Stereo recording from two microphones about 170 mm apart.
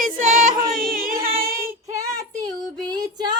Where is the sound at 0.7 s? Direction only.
55° right (ahead or behind).